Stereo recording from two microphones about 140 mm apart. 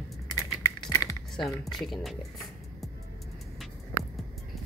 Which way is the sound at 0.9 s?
20° left (ahead or behind).